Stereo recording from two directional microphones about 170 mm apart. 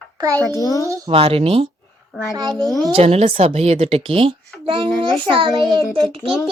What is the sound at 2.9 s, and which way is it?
A woman's voice, 35° right (ahead or behind).